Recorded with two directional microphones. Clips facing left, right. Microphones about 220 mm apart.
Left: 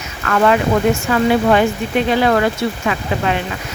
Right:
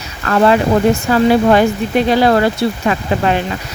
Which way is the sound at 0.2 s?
35° right (ahead or behind).